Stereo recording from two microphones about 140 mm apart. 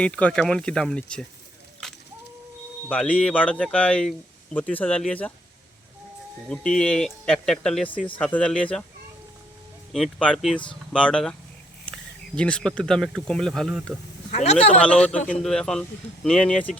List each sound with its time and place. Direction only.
0.0 s speech: 10° left (ahead or behind)
2.9 s speech: 10° left (ahead or behind)
6.5 s speech: 5° left (ahead or behind)
9.9 s speech: 5° left (ahead or behind)
14.3 s speech: 55° left (ahead or behind)
14.8 s speech: 10° left (ahead or behind)